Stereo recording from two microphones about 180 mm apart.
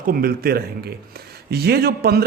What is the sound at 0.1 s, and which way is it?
A man's voice, 55° right (ahead or behind).